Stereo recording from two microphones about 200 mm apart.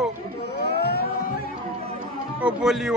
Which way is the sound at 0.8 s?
50° left (ahead or behind).